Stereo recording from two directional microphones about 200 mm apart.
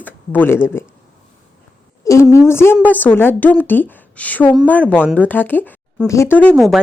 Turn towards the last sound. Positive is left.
turn(degrees=0)  # may be behind; listen again after turning